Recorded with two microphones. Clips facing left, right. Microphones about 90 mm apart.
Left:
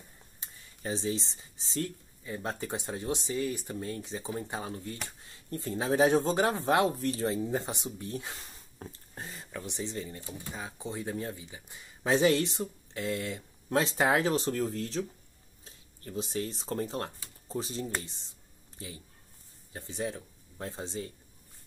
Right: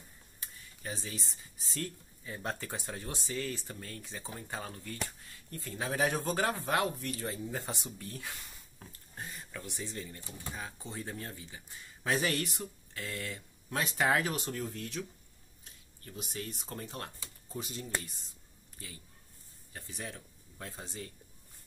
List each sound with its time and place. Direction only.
0.4 s speech: 25° left (ahead or behind)
19.7 s speech: 25° left (ahead or behind)